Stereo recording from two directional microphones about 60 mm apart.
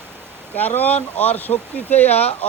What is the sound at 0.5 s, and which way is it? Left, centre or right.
Speech, left.